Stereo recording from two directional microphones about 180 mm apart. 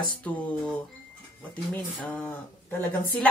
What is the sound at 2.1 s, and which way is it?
Speech, 10° left (ahead or behind).